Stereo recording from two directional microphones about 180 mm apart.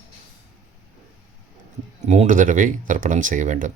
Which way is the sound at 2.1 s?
45° right (ahead or behind).